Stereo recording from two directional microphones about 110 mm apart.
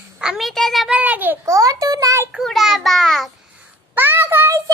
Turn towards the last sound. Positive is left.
turn(degrees=-20)  # may be behind; listen again after turning